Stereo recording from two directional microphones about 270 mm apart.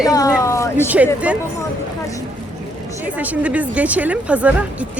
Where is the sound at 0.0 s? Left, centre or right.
Centre.